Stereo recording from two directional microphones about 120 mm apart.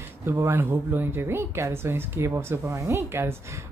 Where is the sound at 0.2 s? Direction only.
20° right (ahead or behind).